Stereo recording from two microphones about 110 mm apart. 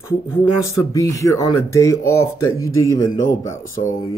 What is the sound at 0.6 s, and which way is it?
Speech, 30° left (ahead or behind).